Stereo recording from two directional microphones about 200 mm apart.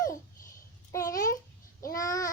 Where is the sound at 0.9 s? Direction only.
15° left (ahead or behind).